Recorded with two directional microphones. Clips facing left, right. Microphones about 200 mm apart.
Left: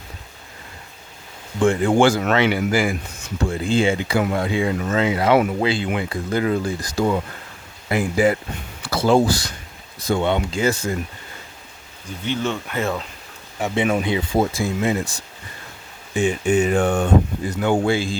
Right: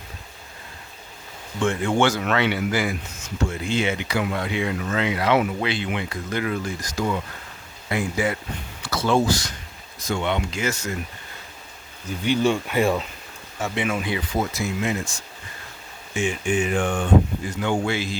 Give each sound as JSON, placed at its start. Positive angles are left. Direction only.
{"t": 1.6, "sound": "speech", "side_deg": 30}
{"t": 5.3, "sound": "speech", "side_deg": 45}
{"t": 5.6, "sound": "speech", "side_deg": 30}
{"t": 12.0, "sound": "speech", "side_deg": -10}
{"t": 13.6, "sound": "speech", "side_deg": 20}
{"t": 16.1, "sound": "speech", "side_deg": 40}
{"t": 17.9, "sound": "speech", "side_deg": 30}